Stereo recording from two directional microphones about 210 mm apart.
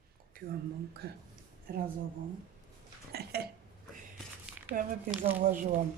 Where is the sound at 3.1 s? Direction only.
50° right (ahead or behind).